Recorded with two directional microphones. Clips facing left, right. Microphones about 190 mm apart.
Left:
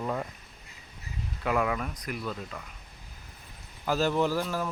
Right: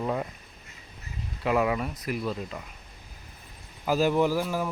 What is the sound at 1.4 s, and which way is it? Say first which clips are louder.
Speech: right 3 dB; 5° right (ahead or behind).